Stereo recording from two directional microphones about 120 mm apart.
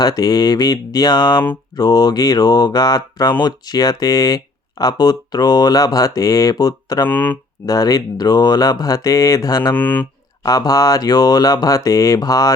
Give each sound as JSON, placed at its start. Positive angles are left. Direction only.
{"t": 0.0, "sound": "speech", "side_deg": 35}
{"t": 7.1, "sound": "speech", "side_deg": 15}
{"t": 7.7, "sound": "speech", "side_deg": 30}
{"t": 9.7, "sound": "speech", "side_deg": 15}
{"t": 10.4, "sound": "speech", "side_deg": 30}